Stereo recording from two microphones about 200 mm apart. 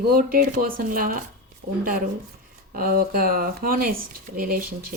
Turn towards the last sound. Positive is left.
turn(degrees=-45)  # may be behind; listen again after turning